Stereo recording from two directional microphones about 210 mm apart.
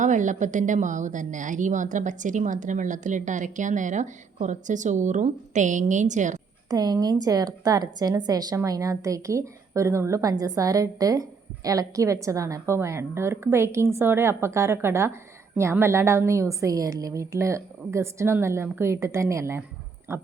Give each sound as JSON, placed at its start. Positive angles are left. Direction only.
{"t": 0.0, "sound": "a woman's voice", "side_deg": -35}
{"t": 6.7, "sound": "a woman's voice", "side_deg": -20}